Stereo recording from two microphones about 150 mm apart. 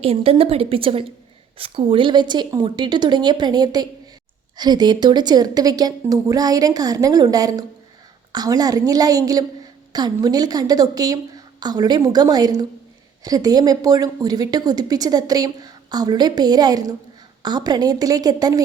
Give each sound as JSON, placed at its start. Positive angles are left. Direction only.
{"t": 0.0, "sound": "a woman's voice", "side_deg": -40}